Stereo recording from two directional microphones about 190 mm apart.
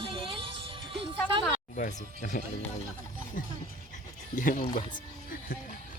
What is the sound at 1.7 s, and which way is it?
Speech, 40° left (ahead or behind).